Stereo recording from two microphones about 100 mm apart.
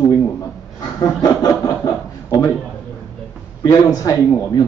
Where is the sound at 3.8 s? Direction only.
40° left (ahead or behind).